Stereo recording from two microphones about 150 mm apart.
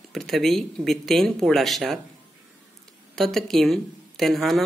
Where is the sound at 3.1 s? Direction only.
Centre (ahead or behind).